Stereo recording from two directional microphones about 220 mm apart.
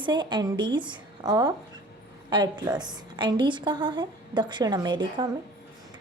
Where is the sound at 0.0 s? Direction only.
20° right (ahead or behind).